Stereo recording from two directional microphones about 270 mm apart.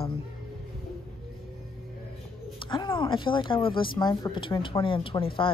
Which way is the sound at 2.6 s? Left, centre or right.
Centre.